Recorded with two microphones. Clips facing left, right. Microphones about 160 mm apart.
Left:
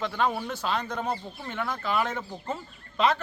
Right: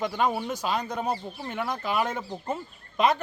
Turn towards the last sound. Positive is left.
turn(degrees=-15)  # may be behind; listen again after turning